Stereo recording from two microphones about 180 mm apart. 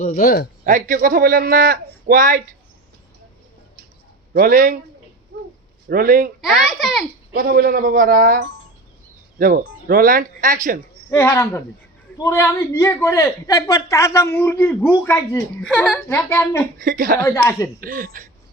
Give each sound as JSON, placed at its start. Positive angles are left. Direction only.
{"t": 0.0, "sound": "speech", "side_deg": 50}
{"t": 0.6, "sound": "a man's voice", "side_deg": -50}
{"t": 4.4, "sound": "a man's voice", "side_deg": -55}
{"t": 5.9, "sound": "a man's voice", "side_deg": -50}
{"t": 6.4, "sound": "a child's voice", "side_deg": 0}
{"t": 7.3, "sound": "a man's voice", "side_deg": -55}
{"t": 11.1, "sound": "a man's voice", "side_deg": 15}
{"t": 16.8, "sound": "a man's voice", "side_deg": -50}
{"t": 17.2, "sound": "a man's voice", "side_deg": 15}
{"t": 17.7, "sound": "a man's voice", "side_deg": -50}